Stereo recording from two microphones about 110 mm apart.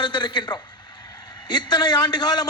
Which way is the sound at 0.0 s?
45° left (ahead or behind).